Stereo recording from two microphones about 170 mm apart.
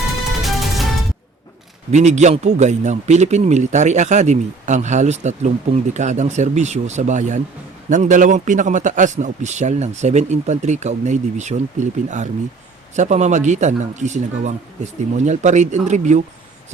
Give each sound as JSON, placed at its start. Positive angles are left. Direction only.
{"t": 0.4, "sound": "music", "side_deg": 0}
{"t": 1.9, "sound": "speech", "side_deg": -40}